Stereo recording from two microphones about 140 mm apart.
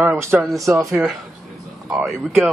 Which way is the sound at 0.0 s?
15° right (ahead or behind).